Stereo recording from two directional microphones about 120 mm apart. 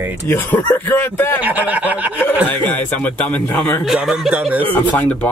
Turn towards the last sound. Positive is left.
turn(degrees=15)  # may be behind; listen again after turning